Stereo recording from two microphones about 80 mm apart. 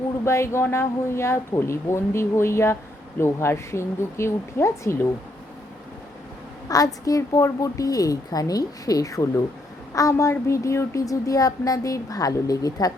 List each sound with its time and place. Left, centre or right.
0.3 s speech: left
6.7 s speech: left